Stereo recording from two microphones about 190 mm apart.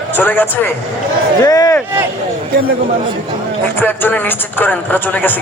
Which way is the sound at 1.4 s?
20° left (ahead or behind).